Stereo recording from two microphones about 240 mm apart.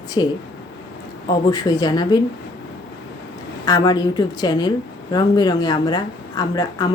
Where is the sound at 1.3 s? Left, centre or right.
Centre.